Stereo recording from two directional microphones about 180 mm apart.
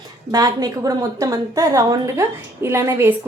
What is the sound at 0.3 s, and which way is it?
A woman's voice, 20° right (ahead or behind).